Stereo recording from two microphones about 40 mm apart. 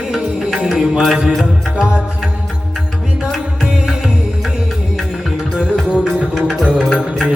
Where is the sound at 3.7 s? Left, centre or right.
Centre.